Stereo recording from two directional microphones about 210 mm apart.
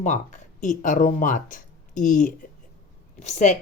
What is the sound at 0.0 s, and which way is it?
A woman's voice, 35° left (ahead or behind).